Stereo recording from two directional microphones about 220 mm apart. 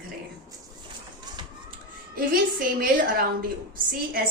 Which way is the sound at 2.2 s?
40° right (ahead or behind).